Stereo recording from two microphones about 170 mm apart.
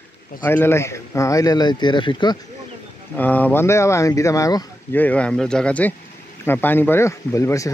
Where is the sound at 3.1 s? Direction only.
10° left (ahead or behind).